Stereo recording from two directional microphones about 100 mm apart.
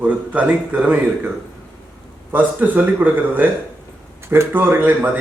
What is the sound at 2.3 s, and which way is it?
A man's voice, 15° right (ahead or behind).